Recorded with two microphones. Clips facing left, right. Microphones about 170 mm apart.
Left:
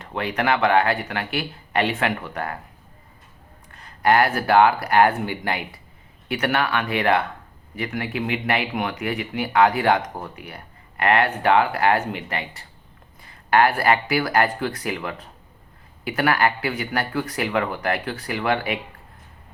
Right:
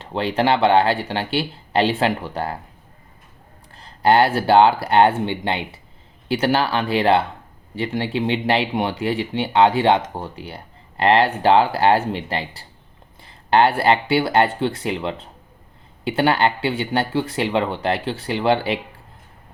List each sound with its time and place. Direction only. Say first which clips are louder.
0.0 s speech: right 4 dB; 30° right (ahead or behind)
3.7 s speech: right 3 dB; 30° right (ahead or behind)